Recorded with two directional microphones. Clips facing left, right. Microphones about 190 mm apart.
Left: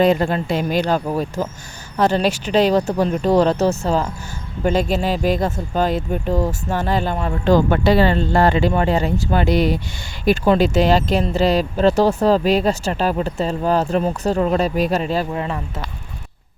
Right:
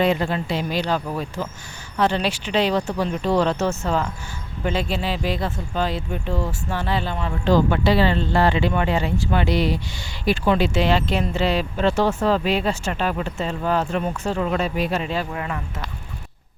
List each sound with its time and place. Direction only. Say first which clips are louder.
0.0 s speech: left 5 dB; 45° left (ahead or behind)
4.6 s speech: left 6 dB; 45° left (ahead or behind); by 15.6 s 30° left (ahead or behind)